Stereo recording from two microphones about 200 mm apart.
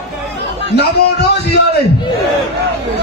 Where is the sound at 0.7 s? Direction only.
55° left (ahead or behind).